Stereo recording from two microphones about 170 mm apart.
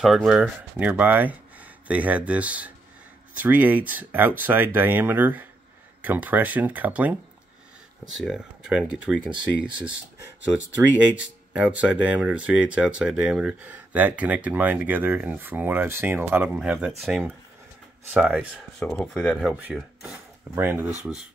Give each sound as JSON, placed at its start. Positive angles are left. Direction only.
{"t": 0.0, "sound": "speech", "side_deg": 0}
{"t": 8.2, "sound": "speech", "side_deg": -5}
{"t": 9.8, "sound": "speech", "side_deg": -15}
{"t": 11.5, "sound": "speech", "side_deg": -10}
{"t": 18.1, "sound": "speech", "side_deg": -10}
{"t": 18.8, "sound": "speech", "side_deg": 5}